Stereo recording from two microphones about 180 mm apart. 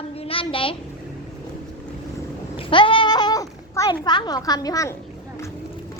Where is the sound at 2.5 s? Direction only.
30° left (ahead or behind).